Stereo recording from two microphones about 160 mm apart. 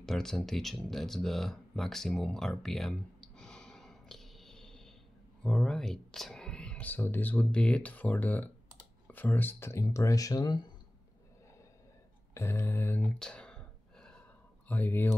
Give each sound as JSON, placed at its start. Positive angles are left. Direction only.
{"t": 0.0, "sound": "speech", "side_deg": 5}
{"t": 12.4, "sound": "a sound", "side_deg": 15}
{"t": 14.7, "sound": "speech", "side_deg": 10}